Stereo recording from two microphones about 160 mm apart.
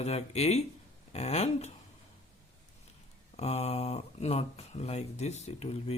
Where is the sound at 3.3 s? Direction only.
45° left (ahead or behind).